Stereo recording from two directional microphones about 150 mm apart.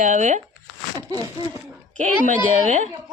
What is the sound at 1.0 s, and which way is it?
Speech, 25° right (ahead or behind).